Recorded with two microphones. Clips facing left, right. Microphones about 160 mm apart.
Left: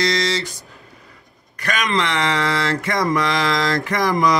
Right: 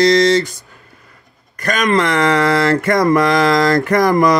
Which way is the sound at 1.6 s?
45° right (ahead or behind).